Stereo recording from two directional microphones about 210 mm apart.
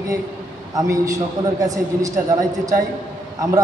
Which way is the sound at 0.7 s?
15° right (ahead or behind).